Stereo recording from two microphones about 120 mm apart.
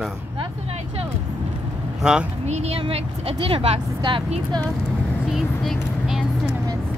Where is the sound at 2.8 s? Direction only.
50° right (ahead or behind).